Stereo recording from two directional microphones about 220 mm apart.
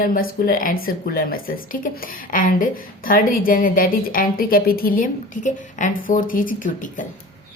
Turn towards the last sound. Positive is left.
turn(degrees=35)  # may be behind; listen again after turning